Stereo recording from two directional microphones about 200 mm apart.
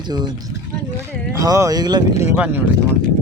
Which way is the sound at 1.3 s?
15° right (ahead or behind).